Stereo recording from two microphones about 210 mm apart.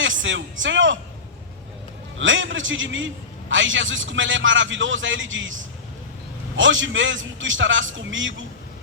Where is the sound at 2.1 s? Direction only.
65° right (ahead or behind).